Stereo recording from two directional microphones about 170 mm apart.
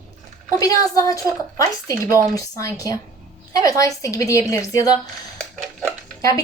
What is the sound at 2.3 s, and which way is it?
A woman's voice, 20° left (ahead or behind).